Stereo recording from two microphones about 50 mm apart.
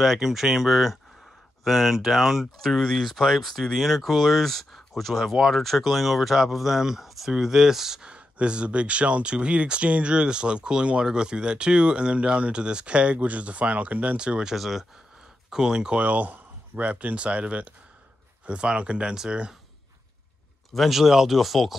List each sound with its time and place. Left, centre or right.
0.0 s speech: centre
8.1 s speech: right
14.1 s speech: centre
14.5 s speech: centre
16.0 s speech: right; by 19.5 s centre
20.7 s speech: centre